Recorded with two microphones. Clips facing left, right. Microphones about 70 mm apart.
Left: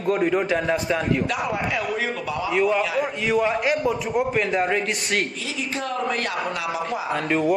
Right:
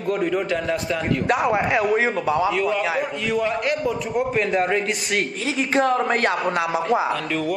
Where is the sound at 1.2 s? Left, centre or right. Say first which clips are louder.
Right 5 dB; right.